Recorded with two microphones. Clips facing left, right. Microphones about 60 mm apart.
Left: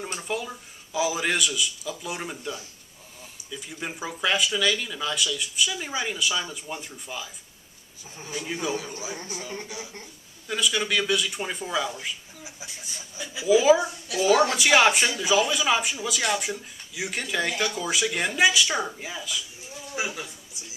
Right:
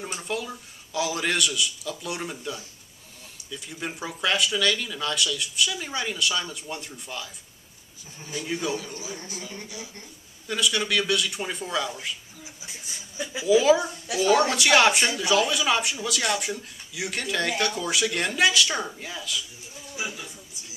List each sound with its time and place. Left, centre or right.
0.0 s speech: centre
8.3 s speech: centre
9.4 s a sound: left
10.5 s speech: centre
13.4 s speech: centre
20.0 s a sound: left